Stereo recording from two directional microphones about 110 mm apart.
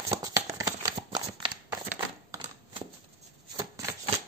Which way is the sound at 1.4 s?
50° right (ahead or behind).